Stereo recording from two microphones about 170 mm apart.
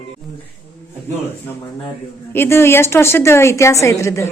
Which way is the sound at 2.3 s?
15° left (ahead or behind).